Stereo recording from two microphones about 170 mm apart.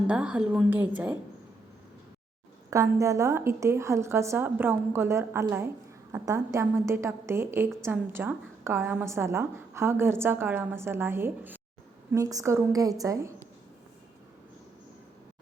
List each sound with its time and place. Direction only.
0.1 s a woman's voice: 5° right (ahead or behind)
2.6 s a woman's voice: 20° right (ahead or behind)